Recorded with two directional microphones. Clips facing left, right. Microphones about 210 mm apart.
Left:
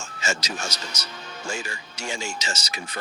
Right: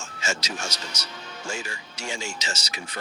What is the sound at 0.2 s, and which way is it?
Speech, 40° left (ahead or behind).